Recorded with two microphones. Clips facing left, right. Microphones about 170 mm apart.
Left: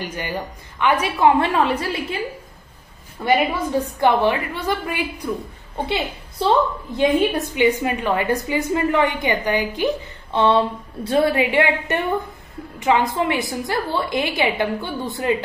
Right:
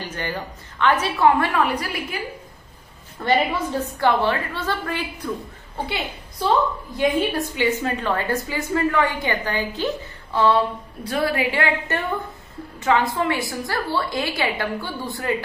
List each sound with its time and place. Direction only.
0.0 s a woman's voice: 10° left (ahead or behind)
1.4 s a woman's voice: 25° left (ahead or behind)
3.3 s a woman's voice: 10° left (ahead or behind)
5.9 s a woman's voice: 25° left (ahead or behind)